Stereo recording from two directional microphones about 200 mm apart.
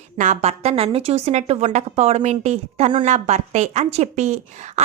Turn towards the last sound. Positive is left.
turn(degrees=-35)  # may be behind; listen again after turning